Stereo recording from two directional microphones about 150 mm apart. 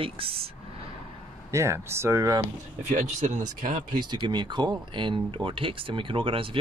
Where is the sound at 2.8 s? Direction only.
55° right (ahead or behind).